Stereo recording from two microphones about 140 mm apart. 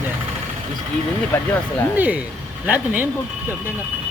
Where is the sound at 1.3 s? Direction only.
15° left (ahead or behind).